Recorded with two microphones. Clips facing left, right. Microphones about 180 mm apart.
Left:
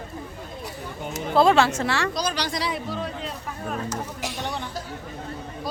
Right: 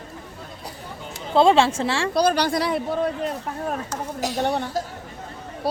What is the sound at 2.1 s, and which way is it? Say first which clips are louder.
Speech: right 8 dB; 55° right (ahead or behind).